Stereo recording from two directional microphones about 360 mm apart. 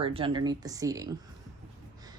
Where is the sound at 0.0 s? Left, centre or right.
Centre.